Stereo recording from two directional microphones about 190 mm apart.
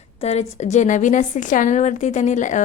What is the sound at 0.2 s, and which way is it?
A woman's voice, 35° left (ahead or behind).